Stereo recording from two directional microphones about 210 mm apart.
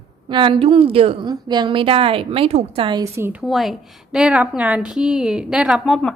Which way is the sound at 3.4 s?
Centre (ahead or behind).